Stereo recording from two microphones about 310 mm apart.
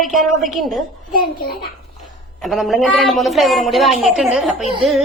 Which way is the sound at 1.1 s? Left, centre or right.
Left.